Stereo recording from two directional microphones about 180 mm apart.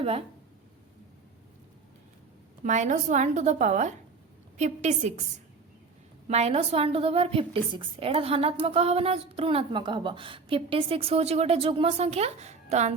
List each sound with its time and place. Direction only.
2.6 s a woman's voice: 40° right (ahead or behind)
6.2 s a woman's voice: 35° right (ahead or behind)